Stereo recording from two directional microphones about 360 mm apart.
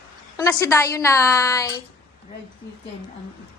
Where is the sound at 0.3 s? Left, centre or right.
Centre.